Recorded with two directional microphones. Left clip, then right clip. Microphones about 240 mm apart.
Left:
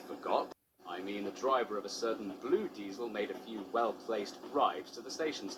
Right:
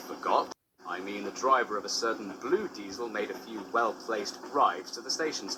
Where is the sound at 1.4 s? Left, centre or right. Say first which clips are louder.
Right 7 dB; right.